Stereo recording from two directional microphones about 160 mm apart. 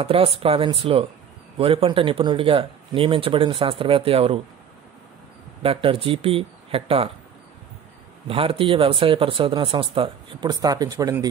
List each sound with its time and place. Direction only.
0.0 s speech: 35° right (ahead or behind)
5.6 s speech: 35° right (ahead or behind)
8.3 s speech: 35° right (ahead or behind)